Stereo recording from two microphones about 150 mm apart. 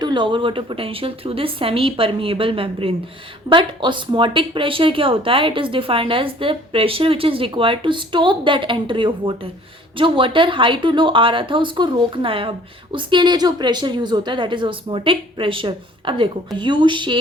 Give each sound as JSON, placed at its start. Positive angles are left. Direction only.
{"t": 0.0, "sound": "speech", "side_deg": -30}